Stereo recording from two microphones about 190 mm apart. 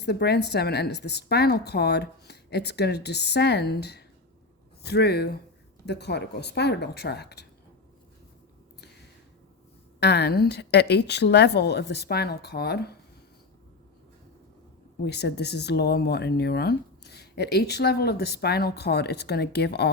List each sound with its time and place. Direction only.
0.0 s speech: 60° left (ahead or behind)
10.0 s speech: 60° left (ahead or behind)
15.0 s speech: 60° left (ahead or behind)